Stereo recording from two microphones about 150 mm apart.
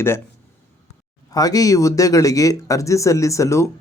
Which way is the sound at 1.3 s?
25° left (ahead or behind).